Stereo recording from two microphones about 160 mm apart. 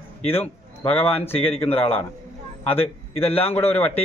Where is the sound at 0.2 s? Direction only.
40° left (ahead or behind).